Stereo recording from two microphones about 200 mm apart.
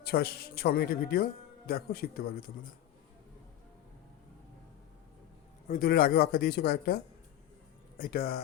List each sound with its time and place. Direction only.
0.0 s speech: 50° left (ahead or behind)
5.6 s speech: 45° left (ahead or behind)